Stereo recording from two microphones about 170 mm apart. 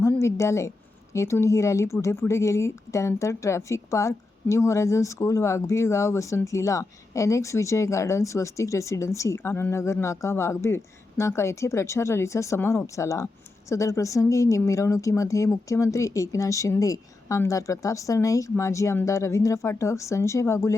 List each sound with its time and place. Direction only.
0.0 s a woman's voice: 15° left (ahead or behind)